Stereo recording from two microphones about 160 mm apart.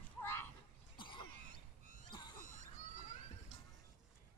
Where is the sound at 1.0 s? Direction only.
30° left (ahead or behind).